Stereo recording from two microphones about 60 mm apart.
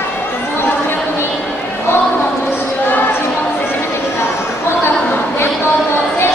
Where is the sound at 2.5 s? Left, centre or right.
Left.